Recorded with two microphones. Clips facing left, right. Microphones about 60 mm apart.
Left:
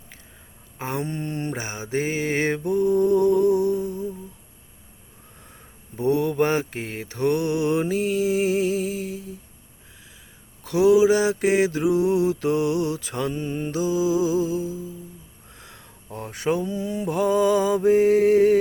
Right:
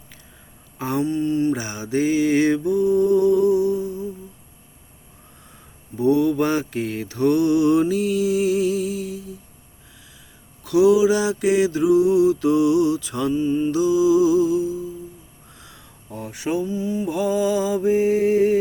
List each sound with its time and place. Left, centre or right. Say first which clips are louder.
0.8 s a sound: right 5 dB; left
1.0 s mantra: right 8 dB; left
1.6 s mantra: right 4 dB; left
6.0 s mantra: right 3 dB; left
10.6 s mantra: right 1 dB; left
13.3 s mantra: right 8 dB; left
13.7 s mantra: right 4 dB; left
15.5 s a sound: left 1 dB; left
16.1 s mantra: even; left